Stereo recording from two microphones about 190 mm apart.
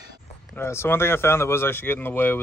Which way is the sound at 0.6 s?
15° left (ahead or behind).